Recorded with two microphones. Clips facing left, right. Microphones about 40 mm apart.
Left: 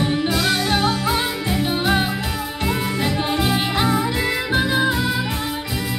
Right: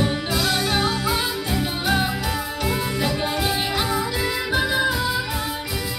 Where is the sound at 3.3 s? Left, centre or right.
Left.